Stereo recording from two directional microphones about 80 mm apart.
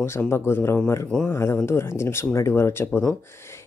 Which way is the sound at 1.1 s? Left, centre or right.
Centre.